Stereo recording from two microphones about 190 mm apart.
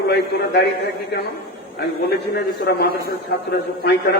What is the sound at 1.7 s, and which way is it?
A man's voice, 60° left (ahead or behind).